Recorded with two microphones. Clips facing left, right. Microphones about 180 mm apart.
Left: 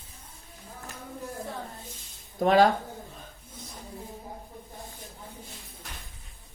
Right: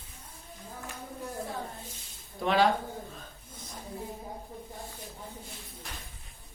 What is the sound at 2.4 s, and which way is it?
Speech, 45° left (ahead or behind).